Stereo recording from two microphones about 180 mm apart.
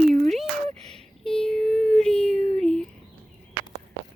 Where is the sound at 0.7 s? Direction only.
35° right (ahead or behind).